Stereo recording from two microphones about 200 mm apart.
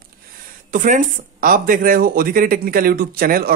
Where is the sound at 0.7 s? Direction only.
40° right (ahead or behind).